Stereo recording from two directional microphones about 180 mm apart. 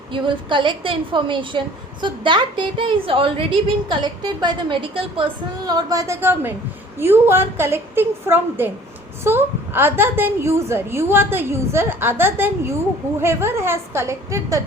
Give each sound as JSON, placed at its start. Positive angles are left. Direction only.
{"t": 0.1, "sound": "a woman's voice", "side_deg": -25}